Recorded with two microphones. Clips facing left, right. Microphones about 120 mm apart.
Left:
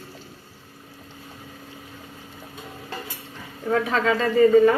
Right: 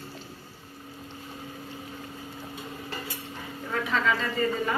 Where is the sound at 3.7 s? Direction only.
65° left (ahead or behind).